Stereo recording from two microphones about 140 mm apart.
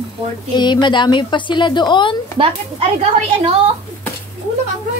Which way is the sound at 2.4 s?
35° right (ahead or behind).